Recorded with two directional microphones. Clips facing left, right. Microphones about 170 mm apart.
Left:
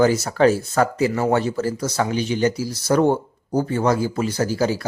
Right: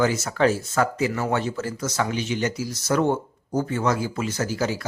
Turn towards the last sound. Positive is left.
turn(degrees=35)  # may be behind; listen again after turning